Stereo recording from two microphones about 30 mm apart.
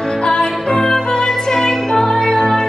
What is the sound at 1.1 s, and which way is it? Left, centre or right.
Music, centre.